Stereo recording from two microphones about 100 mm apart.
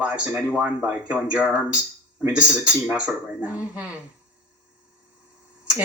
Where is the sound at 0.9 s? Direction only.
15° right (ahead or behind).